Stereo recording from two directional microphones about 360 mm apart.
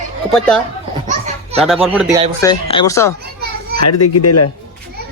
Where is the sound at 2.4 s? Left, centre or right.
Centre.